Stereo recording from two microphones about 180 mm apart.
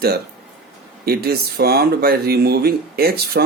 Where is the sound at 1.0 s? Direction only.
60° right (ahead or behind).